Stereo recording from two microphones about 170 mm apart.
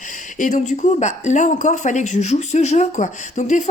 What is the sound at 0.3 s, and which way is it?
Speech, 50° left (ahead or behind).